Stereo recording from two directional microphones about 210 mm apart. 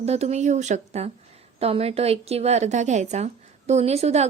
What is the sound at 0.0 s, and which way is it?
A woman's voice, 30° right (ahead or behind).